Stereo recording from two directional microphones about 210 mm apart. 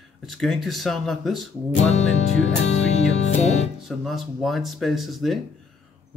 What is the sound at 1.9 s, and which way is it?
Music, 30° left (ahead or behind).